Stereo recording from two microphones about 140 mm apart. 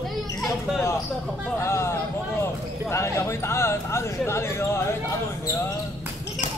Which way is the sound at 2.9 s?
20° left (ahead or behind).